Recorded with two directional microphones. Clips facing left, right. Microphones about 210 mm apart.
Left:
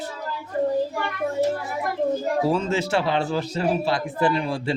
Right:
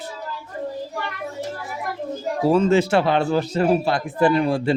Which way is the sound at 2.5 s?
55° right (ahead or behind).